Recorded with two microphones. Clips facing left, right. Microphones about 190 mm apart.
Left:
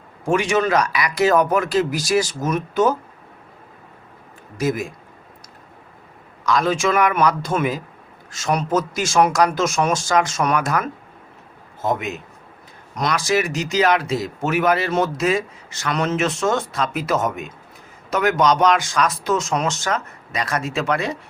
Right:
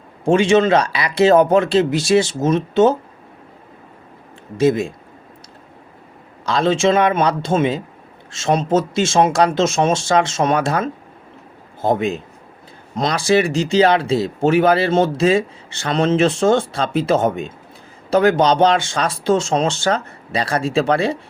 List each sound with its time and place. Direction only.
0.3 s speech: 25° right (ahead or behind)
4.5 s speech: 25° right (ahead or behind)
6.4 s speech: 30° right (ahead or behind)